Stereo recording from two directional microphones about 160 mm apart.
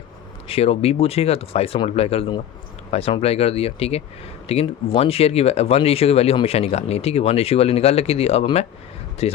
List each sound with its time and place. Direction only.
0.4 s speech: 40° left (ahead or behind)